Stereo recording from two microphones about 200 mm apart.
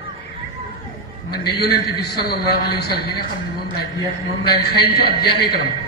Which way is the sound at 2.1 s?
55° left (ahead or behind).